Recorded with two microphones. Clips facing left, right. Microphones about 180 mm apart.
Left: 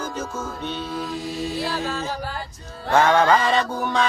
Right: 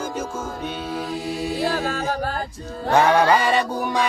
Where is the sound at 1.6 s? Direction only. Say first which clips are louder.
Right 3 dB; 50° right (ahead or behind).